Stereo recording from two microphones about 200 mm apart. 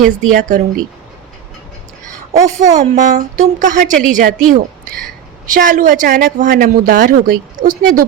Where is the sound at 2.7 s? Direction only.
35° right (ahead or behind).